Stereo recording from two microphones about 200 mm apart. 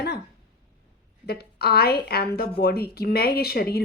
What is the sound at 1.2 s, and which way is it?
A woman's voice, 55° left (ahead or behind).